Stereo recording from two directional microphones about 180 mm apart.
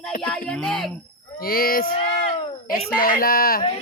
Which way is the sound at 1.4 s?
55° left (ahead or behind).